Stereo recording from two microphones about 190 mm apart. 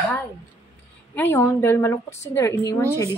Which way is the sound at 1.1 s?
10° left (ahead or behind).